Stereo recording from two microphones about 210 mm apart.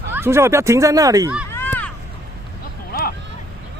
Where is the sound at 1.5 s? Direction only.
10° left (ahead or behind).